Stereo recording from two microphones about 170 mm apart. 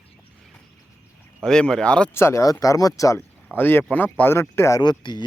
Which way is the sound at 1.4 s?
5° left (ahead or behind).